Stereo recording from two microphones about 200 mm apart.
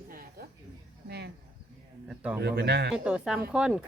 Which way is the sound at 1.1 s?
55° right (ahead or behind).